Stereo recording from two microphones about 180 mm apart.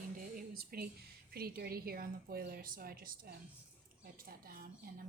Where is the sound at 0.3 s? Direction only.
55° right (ahead or behind).